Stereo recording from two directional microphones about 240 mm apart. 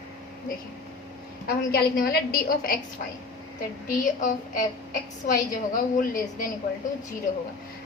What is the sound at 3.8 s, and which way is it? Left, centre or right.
A woman's voice, left.